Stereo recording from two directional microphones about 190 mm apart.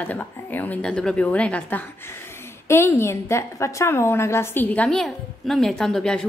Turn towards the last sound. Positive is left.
turn(degrees=5)  # may be behind; listen again after turning